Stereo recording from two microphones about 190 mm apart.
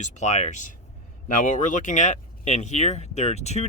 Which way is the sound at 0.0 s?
40° left (ahead or behind).